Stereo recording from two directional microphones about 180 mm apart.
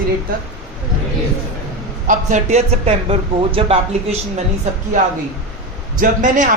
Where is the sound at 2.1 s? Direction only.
45° right (ahead or behind).